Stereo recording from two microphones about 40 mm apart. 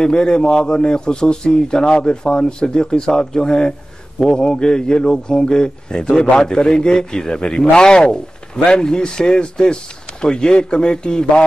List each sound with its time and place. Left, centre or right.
0.0 s a man's voice: centre